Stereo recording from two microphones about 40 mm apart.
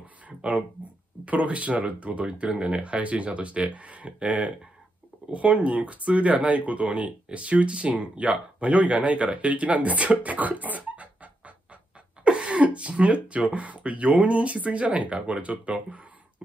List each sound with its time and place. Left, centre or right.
0.4 s speech: right